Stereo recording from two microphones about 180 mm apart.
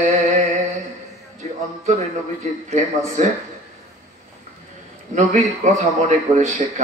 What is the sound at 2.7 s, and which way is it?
Speech, 45° right (ahead or behind).